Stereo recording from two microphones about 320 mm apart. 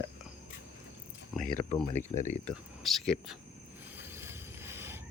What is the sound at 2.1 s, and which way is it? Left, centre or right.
Speech, left.